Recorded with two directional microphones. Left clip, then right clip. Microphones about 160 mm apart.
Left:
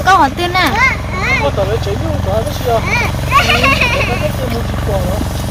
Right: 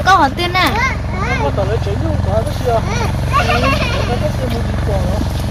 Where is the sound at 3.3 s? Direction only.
45° left (ahead or behind).